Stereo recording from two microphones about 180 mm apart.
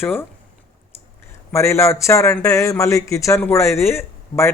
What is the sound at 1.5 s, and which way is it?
Speech, 15° left (ahead or behind).